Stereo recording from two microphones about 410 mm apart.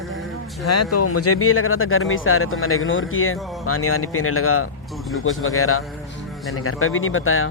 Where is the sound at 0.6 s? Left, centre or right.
Left.